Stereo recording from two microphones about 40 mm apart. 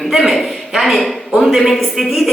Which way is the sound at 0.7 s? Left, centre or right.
Centre.